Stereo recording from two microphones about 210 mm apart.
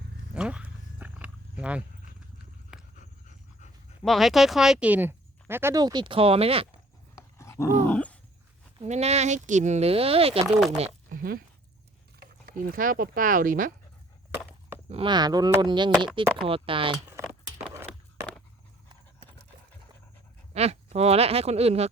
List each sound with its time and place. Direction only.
0.3 s wild animals: 5° right (ahead or behind)
2.9 s pant: 35° left (ahead or behind)
4.0 s speech: centre (ahead or behind); by 6.7 s 25° right (ahead or behind)
7.2 s roar: 15° left (ahead or behind)
7.9 s wild animals: 5° left (ahead or behind)
8.8 s speech: 30° right (ahead or behind)
10.8 s a sound: 30° right (ahead or behind)
11.2 s speech: 45° right (ahead or behind)
14.8 s speech: 25° right (ahead or behind)
20.5 s speech: 30° right (ahead or behind)